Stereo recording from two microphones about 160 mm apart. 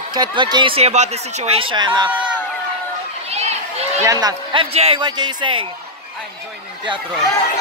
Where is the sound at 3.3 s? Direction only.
40° right (ahead or behind).